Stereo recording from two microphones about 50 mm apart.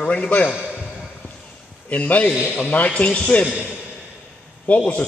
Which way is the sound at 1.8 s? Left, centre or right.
Left.